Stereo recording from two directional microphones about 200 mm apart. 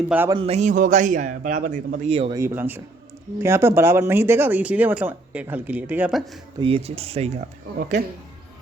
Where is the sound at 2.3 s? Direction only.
10° right (ahead or behind).